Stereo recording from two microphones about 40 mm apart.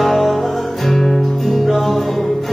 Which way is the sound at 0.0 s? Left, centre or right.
Centre.